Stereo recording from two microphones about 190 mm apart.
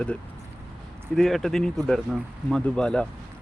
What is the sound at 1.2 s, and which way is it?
Speech, centre (ahead or behind).